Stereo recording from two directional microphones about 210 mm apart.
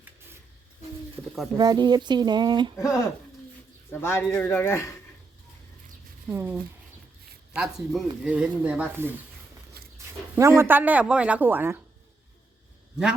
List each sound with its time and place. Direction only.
1.5 s speech: 20° right (ahead or behind)
2.8 s speech: 15° left (ahead or behind)
6.3 s a woman's voice: 10° right (ahead or behind)
9.8 s dog: 45° right (ahead or behind)
10.3 s a woman's voice: 10° right (ahead or behind)